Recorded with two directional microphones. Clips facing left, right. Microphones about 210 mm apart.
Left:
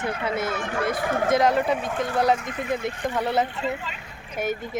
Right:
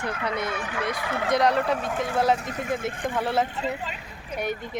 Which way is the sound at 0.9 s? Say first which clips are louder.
Left 6 dB; 50° left (ahead or behind).